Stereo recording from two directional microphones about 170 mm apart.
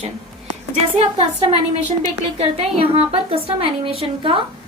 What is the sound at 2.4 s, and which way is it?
A woman's voice, 35° right (ahead or behind).